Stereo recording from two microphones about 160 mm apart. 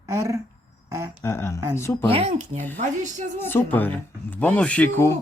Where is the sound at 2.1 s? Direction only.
40° right (ahead or behind).